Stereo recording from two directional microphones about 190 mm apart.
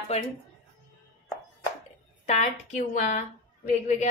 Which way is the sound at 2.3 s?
35° left (ahead or behind).